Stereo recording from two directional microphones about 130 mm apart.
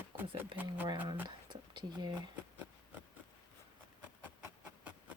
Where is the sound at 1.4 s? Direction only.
35° right (ahead or behind).